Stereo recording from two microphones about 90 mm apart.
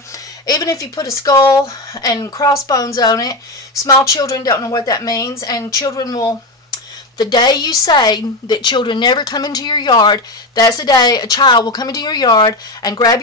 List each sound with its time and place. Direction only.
0.5 s a woman's voice: 45° left (ahead or behind)